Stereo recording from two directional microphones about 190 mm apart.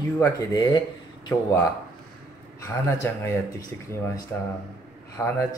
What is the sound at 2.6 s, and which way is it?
Speech, 15° left (ahead or behind).